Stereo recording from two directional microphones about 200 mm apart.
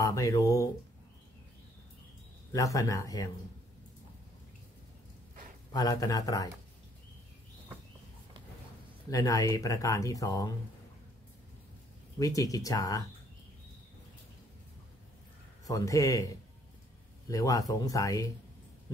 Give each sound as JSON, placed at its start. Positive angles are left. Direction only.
{"t": 0.0, "sound": "speech", "side_deg": 15}
{"t": 2.5, "sound": "speech", "side_deg": 15}
{"t": 5.7, "sound": "speech", "side_deg": 20}
{"t": 9.1, "sound": "speech", "side_deg": 15}
{"t": 12.2, "sound": "speech", "side_deg": 15}
{"t": 15.6, "sound": "speech", "side_deg": 15}
{"t": 17.3, "sound": "speech", "side_deg": 15}